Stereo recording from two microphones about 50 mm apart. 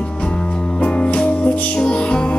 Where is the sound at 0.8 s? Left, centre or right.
Left.